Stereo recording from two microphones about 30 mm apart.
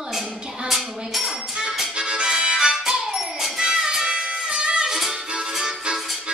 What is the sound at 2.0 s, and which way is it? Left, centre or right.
Music, right.